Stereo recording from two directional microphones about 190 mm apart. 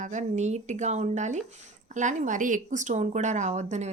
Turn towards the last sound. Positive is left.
turn(degrees=-35)  # may be behind; listen again after turning